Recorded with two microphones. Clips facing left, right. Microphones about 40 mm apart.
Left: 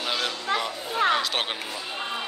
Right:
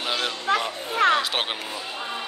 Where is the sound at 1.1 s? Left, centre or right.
Centre.